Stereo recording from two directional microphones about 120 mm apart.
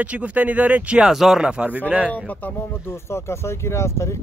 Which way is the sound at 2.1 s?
10° left (ahead or behind).